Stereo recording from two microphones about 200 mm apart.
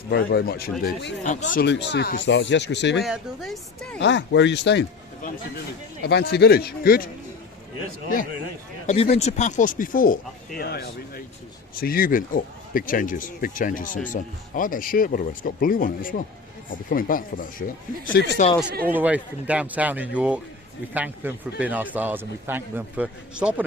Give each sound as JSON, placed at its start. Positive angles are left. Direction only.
{"t": 0.1, "sound": "speech", "side_deg": 50}
{"t": 1.2, "sound": "speech", "side_deg": 40}
{"t": 1.6, "sound": "speech", "side_deg": 60}
{"t": 3.0, "sound": "speech", "side_deg": 0}
{"t": 3.9, "sound": "speech", "side_deg": 65}
{"t": 6.0, "sound": "speech", "side_deg": 55}
{"t": 8.9, "sound": "speech", "side_deg": 30}
{"t": 18.1, "sound": "speech", "side_deg": 60}
{"t": 18.7, "sound": "speech", "side_deg": -45}
{"t": 18.9, "sound": "a man's voice", "side_deg": -5}